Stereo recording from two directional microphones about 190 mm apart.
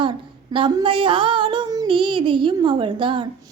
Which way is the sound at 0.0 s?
25° right (ahead or behind).